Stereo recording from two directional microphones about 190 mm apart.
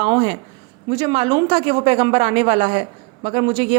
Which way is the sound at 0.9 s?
30° right (ahead or behind).